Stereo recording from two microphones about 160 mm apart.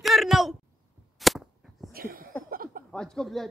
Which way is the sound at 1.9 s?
65° right (ahead or behind).